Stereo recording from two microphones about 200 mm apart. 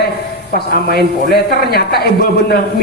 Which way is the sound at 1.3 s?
50° left (ahead or behind).